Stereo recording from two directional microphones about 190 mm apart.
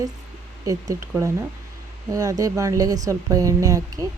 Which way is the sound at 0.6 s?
20° right (ahead or behind).